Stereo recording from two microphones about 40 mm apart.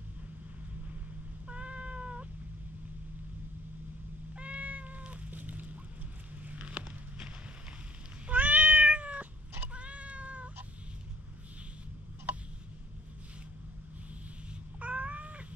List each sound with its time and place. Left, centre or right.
1.5 s cat: right
4.4 s cat: right
6.4 s a sound: right
6.7 s a sound: right
8.3 s cat: right
14.8 s cat: right